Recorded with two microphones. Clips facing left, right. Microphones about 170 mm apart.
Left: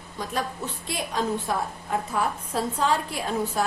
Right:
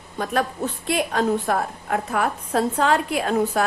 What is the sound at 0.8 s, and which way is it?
A woman's voice, 60° right (ahead or behind).